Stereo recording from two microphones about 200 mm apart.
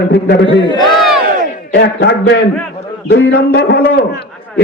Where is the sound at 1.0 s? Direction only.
Centre (ahead or behind).